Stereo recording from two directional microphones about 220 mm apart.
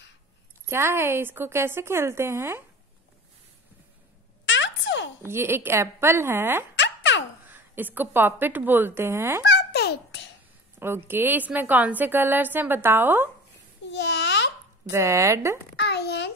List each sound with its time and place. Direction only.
0.7 s a woman's voice: 10° right (ahead or behind)
4.5 s a sound: 55° left (ahead or behind)
5.2 s a woman's voice: 10° right (ahead or behind)
6.7 s music: 55° left (ahead or behind)
7.5 s a woman's voice: 10° right (ahead or behind)
9.4 s babbling: 50° left (ahead or behind)
11.1 s a woman's voice: 10° right (ahead or behind)
13.8 s babbling: 50° left (ahead or behind)
14.9 s a woman's voice: 15° right (ahead or behind)
15.7 s a sound: 50° left (ahead or behind)